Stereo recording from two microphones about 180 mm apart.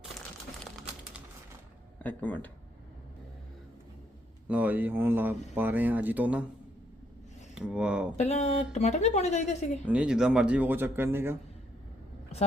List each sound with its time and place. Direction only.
2.0 s speech: 10° left (ahead or behind)
4.4 s speech: 10° right (ahead or behind)
7.5 s speech: 5° right (ahead or behind)
8.1 s speech: 35° left (ahead or behind)
9.8 s speech: 5° right (ahead or behind)